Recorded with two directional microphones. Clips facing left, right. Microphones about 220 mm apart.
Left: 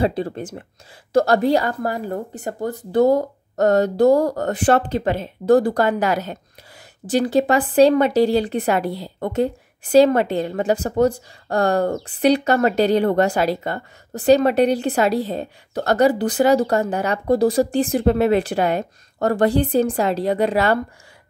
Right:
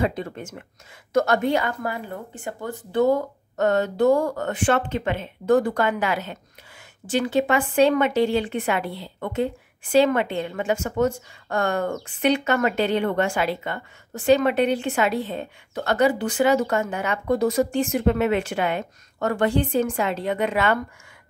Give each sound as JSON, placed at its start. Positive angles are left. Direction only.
{"t": 0.0, "sound": "a woman's voice", "side_deg": 35}